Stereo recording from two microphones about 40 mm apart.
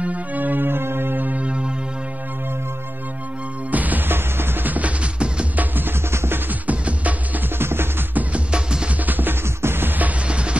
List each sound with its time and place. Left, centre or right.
0.0 s music: right
0.7 s music: right
3.7 s music: right
5.6 s music: right
6.7 s music: right
7.5 s music: right
8.5 s music: right
9.0 s music: right
9.6 s music: right
10.2 s music: right